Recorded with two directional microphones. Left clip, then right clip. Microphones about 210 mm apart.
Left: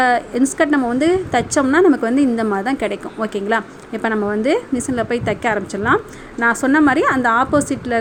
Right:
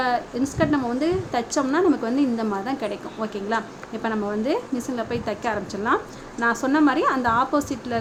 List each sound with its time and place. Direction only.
0.0 s a woman's voice: 30° left (ahead or behind)